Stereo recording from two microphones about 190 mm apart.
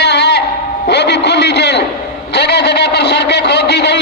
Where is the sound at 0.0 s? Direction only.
65° left (ahead or behind).